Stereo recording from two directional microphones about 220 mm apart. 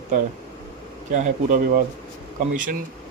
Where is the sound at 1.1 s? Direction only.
35° right (ahead or behind).